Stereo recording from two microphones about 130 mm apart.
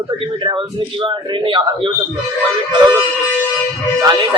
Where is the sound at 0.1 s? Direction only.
40° right (ahead or behind).